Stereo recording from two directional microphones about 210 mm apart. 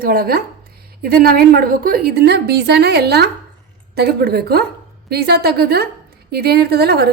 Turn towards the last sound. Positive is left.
turn(degrees=-50)  # may be behind; listen again after turning